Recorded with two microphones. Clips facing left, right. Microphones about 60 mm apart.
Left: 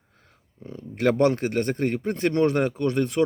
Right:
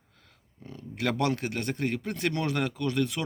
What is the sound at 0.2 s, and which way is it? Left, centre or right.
A man's voice, left.